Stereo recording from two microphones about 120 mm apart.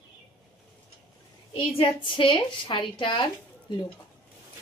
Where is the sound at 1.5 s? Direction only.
50° left (ahead or behind).